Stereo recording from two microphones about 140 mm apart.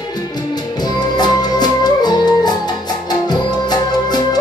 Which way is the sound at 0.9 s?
30° left (ahead or behind).